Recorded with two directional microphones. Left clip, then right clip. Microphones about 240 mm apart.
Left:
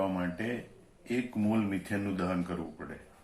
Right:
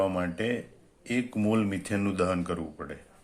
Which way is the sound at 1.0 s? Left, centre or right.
Right.